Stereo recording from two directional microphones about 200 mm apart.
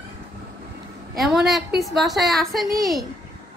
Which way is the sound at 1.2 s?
Centre (ahead or behind).